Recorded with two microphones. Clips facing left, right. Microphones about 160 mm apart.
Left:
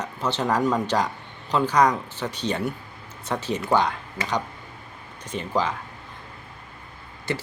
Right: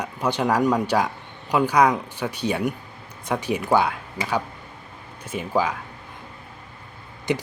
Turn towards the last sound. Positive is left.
turn(degrees=-15)  # may be behind; listen again after turning